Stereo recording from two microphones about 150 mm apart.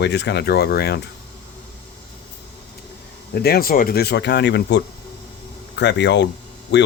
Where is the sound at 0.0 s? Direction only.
90° left.